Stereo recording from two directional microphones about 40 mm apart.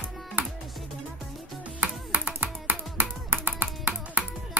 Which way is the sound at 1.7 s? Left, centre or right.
Right.